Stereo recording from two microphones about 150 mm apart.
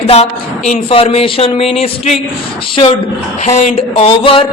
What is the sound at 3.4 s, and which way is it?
Speech, 50° left (ahead or behind).